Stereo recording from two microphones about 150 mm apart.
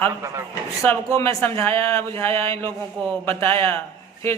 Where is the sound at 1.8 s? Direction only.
20° left (ahead or behind).